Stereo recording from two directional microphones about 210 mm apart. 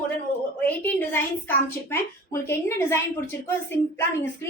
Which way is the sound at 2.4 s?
10° left (ahead or behind).